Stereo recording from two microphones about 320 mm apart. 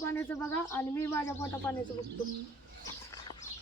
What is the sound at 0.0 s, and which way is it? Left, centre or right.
Speech, centre.